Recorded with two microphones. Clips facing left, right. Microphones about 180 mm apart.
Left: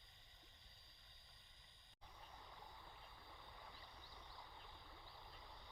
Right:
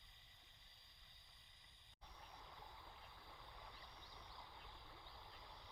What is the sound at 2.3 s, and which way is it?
Boat, centre (ahead or behind).